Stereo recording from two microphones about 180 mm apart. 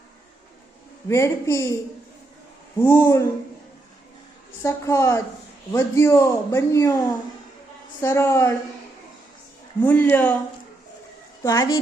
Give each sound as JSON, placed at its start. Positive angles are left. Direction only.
{"t": 1.0, "sound": "a man's voice", "side_deg": 15}
{"t": 4.6, "sound": "a man's voice", "side_deg": 15}
{"t": 9.8, "sound": "a man's voice", "side_deg": 10}
{"t": 11.4, "sound": "a man's voice", "side_deg": 15}